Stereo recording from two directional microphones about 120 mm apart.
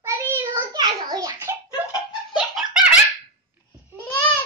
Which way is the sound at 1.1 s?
30° right (ahead or behind).